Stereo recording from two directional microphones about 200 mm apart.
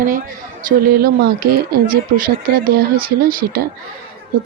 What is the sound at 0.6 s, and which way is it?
Speech, 45° right (ahead or behind).